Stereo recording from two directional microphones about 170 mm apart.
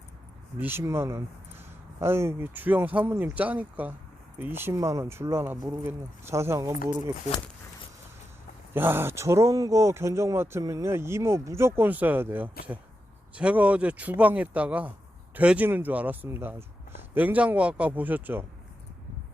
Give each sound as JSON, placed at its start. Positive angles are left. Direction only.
{"t": 0.6, "sound": "speech", "side_deg": -15}
{"t": 8.7, "sound": "speech", "side_deg": -10}